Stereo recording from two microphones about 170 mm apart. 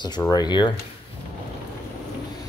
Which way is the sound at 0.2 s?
25° left (ahead or behind).